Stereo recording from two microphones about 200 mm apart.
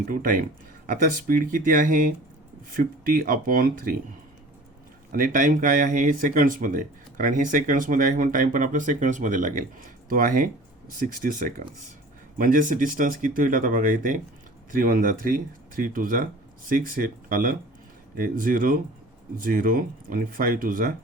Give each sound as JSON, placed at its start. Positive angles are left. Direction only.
{"t": 0.0, "sound": "speech", "side_deg": -45}
{"t": 5.1, "sound": "speech", "side_deg": -45}